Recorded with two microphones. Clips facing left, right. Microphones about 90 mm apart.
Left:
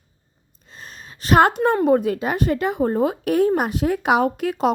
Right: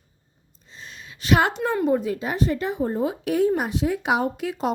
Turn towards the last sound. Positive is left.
turn(degrees=50)  # may be behind; listen again after turning